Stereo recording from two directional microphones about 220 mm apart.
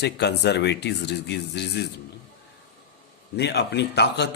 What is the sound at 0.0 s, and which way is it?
A man's voice, 50° left (ahead or behind).